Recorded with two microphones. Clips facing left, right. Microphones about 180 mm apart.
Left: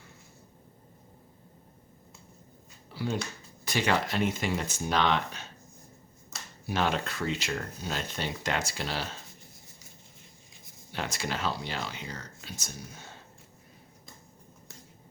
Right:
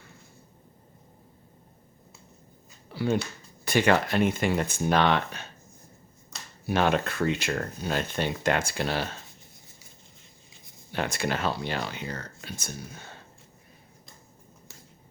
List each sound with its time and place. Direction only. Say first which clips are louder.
2.9 s speech: right 6 dB; 60° right (ahead or behind)
6.7 s speech: right 5 dB; 55° right (ahead or behind)
10.9 s speech: right 5 dB; 55° right (ahead or behind)